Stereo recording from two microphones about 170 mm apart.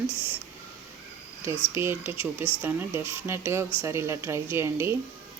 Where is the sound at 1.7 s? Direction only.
15° right (ahead or behind).